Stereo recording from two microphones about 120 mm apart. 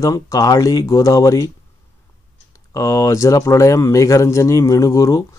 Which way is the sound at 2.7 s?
30° left (ahead or behind).